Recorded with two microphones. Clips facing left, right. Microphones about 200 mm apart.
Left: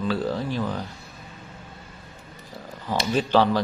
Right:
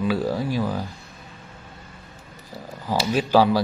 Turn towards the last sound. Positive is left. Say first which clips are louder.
# right 2 dB
turn(degrees=-10)  # may be behind; listen again after turning